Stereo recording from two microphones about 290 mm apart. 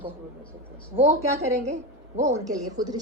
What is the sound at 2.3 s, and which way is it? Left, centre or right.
Speech, centre.